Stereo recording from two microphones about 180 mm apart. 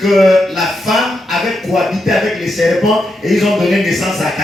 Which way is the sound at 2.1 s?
Centre (ahead or behind).